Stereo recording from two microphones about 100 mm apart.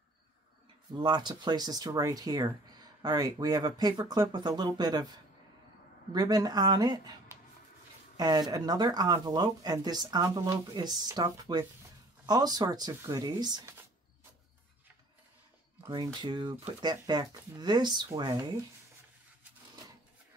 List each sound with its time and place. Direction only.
0.9 s speech: 50° right (ahead or behind)
16.2 s speech: 45° right (ahead or behind)